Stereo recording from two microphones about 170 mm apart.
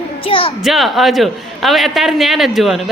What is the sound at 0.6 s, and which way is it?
A man's voice, centre (ahead or behind).